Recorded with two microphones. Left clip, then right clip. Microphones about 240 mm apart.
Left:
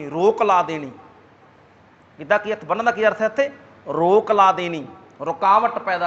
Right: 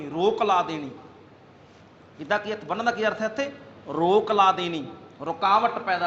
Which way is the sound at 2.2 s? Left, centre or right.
Left.